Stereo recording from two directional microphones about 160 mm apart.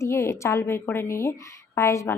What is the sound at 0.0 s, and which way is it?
A woman's voice, 15° left (ahead or behind).